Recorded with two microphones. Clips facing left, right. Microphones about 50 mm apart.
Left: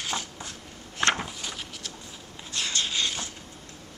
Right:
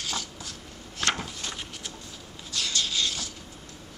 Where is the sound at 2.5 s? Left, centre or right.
Left.